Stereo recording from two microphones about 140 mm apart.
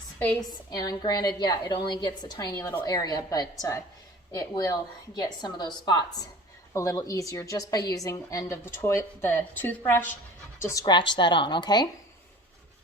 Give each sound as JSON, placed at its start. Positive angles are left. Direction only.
{"t": 0.7, "sound": "a woman's voice", "side_deg": 30}